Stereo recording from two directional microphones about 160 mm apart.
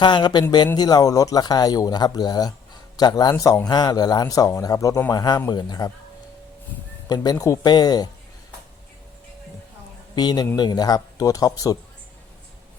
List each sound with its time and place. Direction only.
0.0 s speech: 30° left (ahead or behind)
7.1 s speech: 25° left (ahead or behind)
10.2 s speech: 25° left (ahead or behind)